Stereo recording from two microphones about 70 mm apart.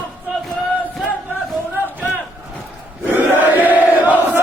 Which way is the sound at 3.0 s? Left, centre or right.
Right.